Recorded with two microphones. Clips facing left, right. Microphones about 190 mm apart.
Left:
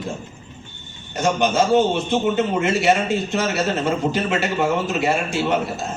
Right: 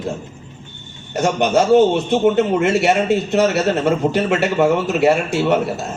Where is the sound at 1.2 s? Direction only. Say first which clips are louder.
Right 3 dB; 65° right (ahead or behind).